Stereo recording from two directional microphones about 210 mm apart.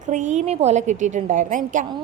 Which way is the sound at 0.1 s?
35° right (ahead or behind).